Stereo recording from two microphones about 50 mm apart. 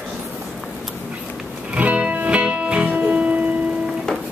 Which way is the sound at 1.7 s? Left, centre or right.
Right.